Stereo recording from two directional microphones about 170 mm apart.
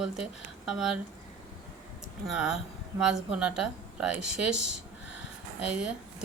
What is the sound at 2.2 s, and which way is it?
A woman's voice, 5° right (ahead or behind).